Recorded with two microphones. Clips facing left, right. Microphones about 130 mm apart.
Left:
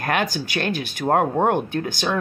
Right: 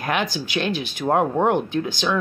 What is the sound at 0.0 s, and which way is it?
A woman's voice, 45° left (ahead or behind).